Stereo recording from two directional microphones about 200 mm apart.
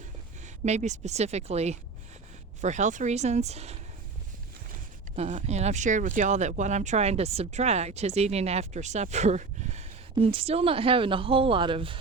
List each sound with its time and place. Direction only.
0.4 s speech: 35° right (ahead or behind)
5.1 s speech: 35° right (ahead or behind)